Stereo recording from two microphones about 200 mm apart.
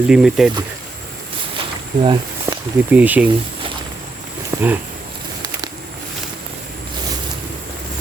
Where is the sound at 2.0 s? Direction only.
20° right (ahead or behind).